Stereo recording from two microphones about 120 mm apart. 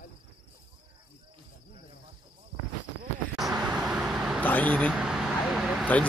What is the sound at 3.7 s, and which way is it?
Vehicle, 5° right (ahead or behind).